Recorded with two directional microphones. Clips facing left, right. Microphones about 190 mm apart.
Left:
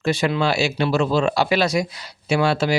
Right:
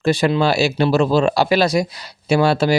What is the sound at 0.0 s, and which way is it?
Speech, 35° right (ahead or behind).